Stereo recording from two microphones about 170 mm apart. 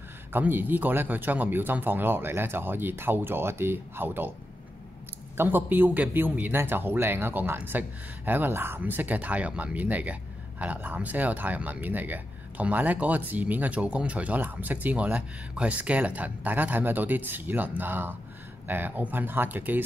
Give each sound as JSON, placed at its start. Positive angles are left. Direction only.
{"t": 0.3, "sound": "speech", "side_deg": -10}
{"t": 5.4, "sound": "speech", "side_deg": -10}